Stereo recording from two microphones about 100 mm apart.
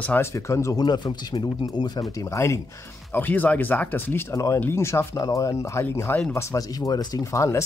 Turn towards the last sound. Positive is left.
turn(degrees=30)  # may be behind; listen again after turning